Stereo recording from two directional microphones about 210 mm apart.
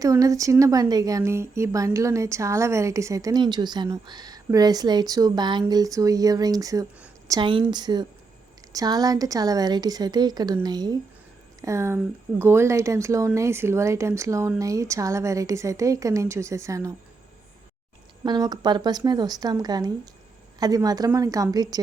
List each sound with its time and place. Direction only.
0.0 s a woman's voice: 15° right (ahead or behind)
18.2 s a woman's voice: 20° right (ahead or behind)